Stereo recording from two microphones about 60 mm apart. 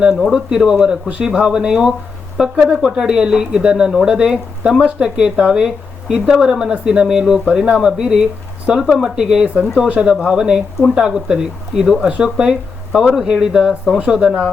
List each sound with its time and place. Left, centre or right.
0.2 s speech: centre
10.8 s speech: centre
11.0 s speech: centre